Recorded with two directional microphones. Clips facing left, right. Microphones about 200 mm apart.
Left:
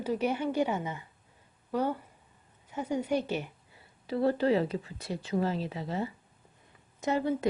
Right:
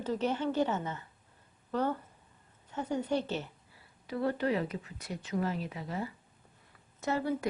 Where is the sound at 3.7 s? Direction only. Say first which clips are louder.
Left 5 dB; 30° left (ahead or behind).